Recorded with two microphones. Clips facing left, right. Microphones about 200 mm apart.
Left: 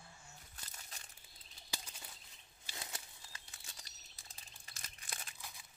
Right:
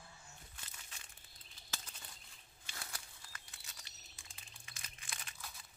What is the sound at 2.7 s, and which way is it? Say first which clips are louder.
Crumpling: left 2 dB; 20° left (ahead or behind).